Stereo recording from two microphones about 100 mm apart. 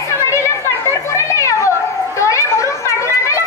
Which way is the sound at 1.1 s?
30° left (ahead or behind).